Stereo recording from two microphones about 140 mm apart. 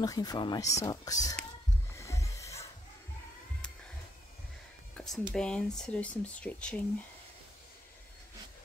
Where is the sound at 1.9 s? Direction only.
20° left (ahead or behind).